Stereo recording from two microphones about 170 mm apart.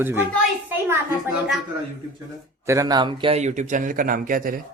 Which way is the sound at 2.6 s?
20° right (ahead or behind).